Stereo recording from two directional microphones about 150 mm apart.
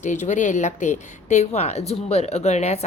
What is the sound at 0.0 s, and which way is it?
Speech, 55° left (ahead or behind).